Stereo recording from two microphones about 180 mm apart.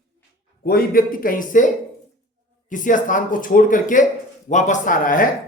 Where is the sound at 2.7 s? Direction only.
45° left (ahead or behind).